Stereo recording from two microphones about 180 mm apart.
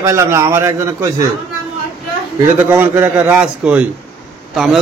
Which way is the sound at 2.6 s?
10° right (ahead or behind).